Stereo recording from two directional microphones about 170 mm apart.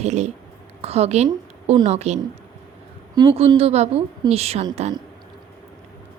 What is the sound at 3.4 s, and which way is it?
Speech, 35° right (ahead or behind).